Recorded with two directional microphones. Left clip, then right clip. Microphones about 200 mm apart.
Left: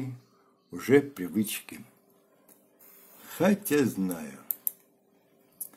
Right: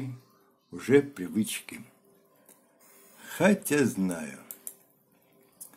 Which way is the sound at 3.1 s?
10° right (ahead or behind).